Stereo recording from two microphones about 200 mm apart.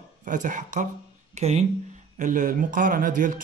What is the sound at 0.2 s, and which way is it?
Speech, 40° right (ahead or behind).